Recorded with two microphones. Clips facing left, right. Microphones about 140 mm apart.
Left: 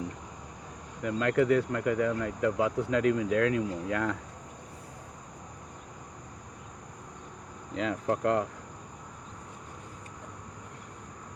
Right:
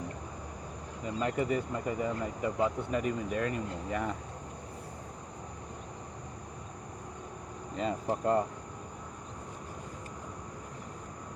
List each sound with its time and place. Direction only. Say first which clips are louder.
1.0 s speech: left 6 dB; 75° left (ahead or behind)
7.8 s speech: left 3 dB; 90° left